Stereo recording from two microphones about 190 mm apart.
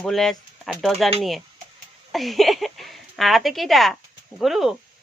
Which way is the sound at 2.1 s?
Centre (ahead or behind).